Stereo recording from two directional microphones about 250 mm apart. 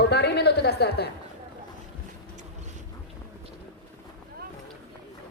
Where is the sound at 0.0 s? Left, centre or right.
Left.